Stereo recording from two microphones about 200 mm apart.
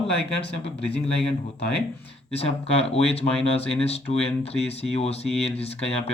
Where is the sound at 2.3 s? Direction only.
30° left (ahead or behind).